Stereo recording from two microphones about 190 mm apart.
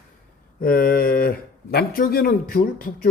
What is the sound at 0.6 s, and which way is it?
Speech, 50° left (ahead or behind).